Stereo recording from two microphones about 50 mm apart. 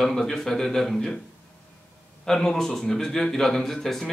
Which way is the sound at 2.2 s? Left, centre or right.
Centre.